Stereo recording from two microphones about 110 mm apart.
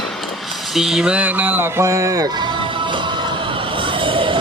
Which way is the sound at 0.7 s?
5° right (ahead or behind).